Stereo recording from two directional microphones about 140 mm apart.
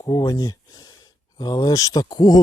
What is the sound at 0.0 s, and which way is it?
Speech, 25° left (ahead or behind).